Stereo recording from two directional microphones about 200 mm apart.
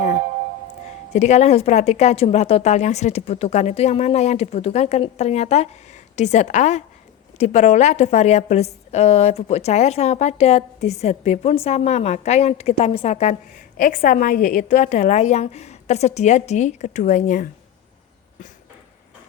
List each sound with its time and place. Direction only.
1.1 s a woman's voice: 35° left (ahead or behind)